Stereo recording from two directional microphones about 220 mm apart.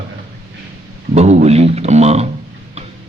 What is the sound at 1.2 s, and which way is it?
A man's voice, 30° right (ahead or behind).